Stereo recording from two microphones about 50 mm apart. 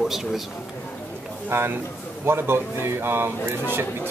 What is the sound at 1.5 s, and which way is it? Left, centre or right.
Speech, right.